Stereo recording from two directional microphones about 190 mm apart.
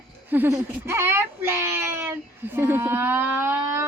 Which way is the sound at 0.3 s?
10° right (ahead or behind).